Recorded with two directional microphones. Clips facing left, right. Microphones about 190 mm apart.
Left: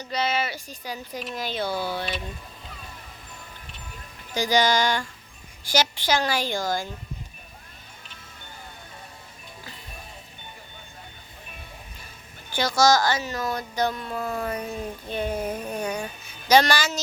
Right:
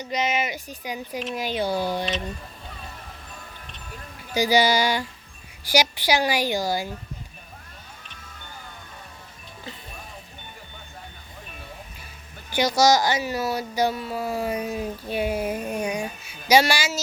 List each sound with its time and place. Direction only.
0.0 s speech: 15° right (ahead or behind)
4.4 s speech: 10° right (ahead or behind)
12.5 s speech: 15° right (ahead or behind)